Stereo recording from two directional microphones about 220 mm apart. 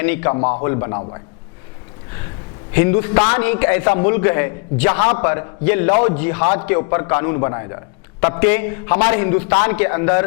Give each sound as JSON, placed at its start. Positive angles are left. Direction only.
{"t": 0.0, "sound": "a man's voice", "side_deg": 10}
{"t": 0.3, "sound": "a man's voice", "side_deg": 30}
{"t": 0.6, "sound": "a man's voice", "side_deg": 15}
{"t": 2.7, "sound": "a man's voice", "side_deg": 15}